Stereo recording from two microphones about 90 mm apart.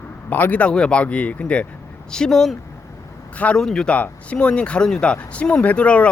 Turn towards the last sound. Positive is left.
turn(degrees=15)  # may be behind; listen again after turning